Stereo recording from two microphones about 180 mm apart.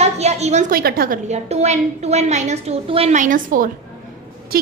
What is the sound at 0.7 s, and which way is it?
Speech, 55° right (ahead or behind).